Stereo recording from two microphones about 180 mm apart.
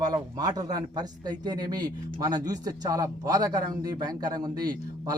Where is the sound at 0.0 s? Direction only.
20° right (ahead or behind).